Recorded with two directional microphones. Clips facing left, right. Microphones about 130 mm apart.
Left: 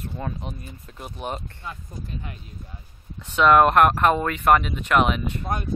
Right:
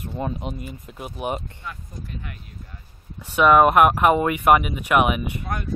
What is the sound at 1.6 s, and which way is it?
Speech, 25° left (ahead or behind).